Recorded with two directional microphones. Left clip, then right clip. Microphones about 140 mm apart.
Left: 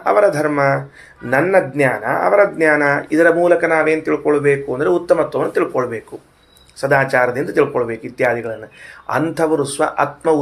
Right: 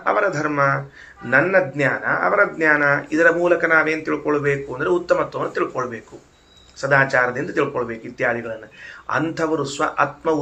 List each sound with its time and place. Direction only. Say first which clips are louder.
0.0 s speech: left 6 dB; 40° left (ahead or behind)